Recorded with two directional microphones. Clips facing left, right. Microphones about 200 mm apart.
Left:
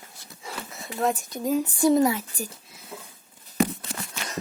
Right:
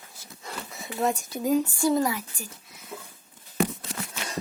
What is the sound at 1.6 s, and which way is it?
Speech, 20° left (ahead or behind).